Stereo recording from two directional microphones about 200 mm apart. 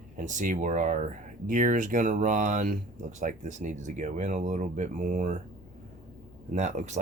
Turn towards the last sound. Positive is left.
turn(degrees=-35)  # may be behind; listen again after turning